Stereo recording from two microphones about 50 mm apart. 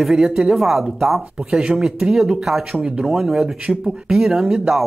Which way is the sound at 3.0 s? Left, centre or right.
Centre.